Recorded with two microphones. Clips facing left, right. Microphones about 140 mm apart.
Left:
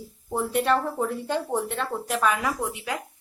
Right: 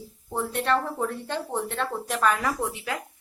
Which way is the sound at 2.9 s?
15° left (ahead or behind).